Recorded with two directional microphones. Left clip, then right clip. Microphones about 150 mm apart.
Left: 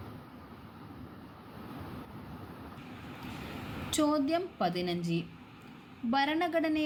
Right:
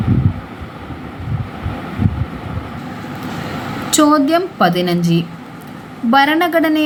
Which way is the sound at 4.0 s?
15° left (ahead or behind).